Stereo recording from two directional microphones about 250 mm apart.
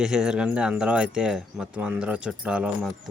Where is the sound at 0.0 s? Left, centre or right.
Centre.